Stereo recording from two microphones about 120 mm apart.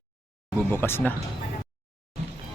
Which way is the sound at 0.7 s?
20° left (ahead or behind).